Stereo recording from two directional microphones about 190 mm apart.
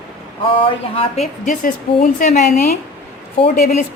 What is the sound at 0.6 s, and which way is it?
Speech, 30° left (ahead or behind).